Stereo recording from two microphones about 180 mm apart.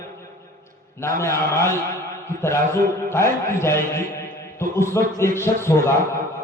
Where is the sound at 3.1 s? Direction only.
15° left (ahead or behind).